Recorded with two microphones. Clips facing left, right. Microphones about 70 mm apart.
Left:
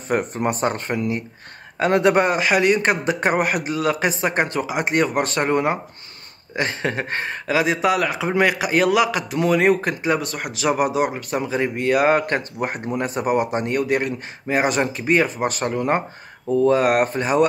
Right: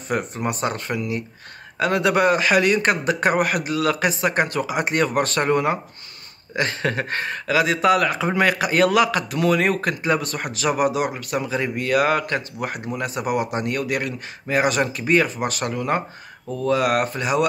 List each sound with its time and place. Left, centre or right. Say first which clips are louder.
0.1 s speech: left 3 dB; left
7.9 s a man's voice: right 1 dB; centre
12.2 s speech: left 2 dB; left